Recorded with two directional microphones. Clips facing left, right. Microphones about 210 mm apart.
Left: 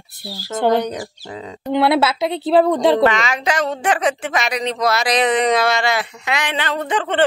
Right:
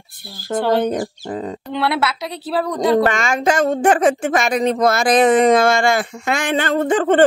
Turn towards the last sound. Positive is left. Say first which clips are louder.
# right 6 dB
turn(degrees=-45)  # may be behind; listen again after turning